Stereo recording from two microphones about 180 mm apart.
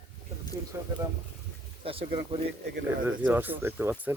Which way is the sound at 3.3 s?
10° right (ahead or behind).